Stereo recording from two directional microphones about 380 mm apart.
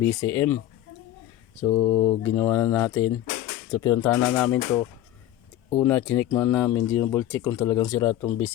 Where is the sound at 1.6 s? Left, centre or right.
Centre.